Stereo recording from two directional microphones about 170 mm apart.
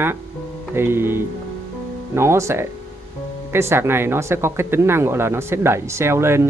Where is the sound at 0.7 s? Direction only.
15° right (ahead or behind).